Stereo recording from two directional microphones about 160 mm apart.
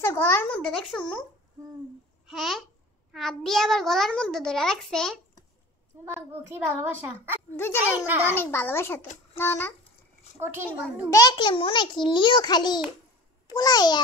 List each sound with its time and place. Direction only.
0.0 s a child's voice: 15° left (ahead or behind)
2.2 s babbling: centre (ahead or behind)
3.1 s a child's voice: centre (ahead or behind)
6.0 s a child's voice: 15° right (ahead or behind)
7.5 s a child's voice: 15° left (ahead or behind)
10.4 s a child's voice: 10° right (ahead or behind)
11.1 s a child's voice: 20° left (ahead or behind)